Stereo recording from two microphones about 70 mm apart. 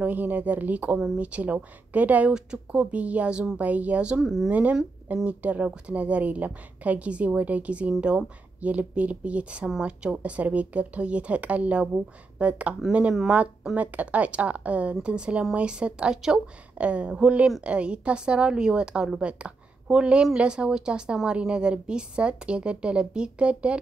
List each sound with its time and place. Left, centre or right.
0.0 s a woman's voice: right
4.2 s speech: centre
4.5 s a woman's voice: right
13.7 s a woman's voice: right